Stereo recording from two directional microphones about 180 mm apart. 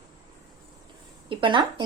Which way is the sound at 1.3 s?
25° right (ahead or behind).